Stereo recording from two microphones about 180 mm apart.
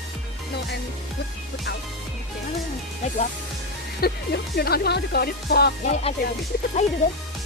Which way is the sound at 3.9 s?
60° left (ahead or behind).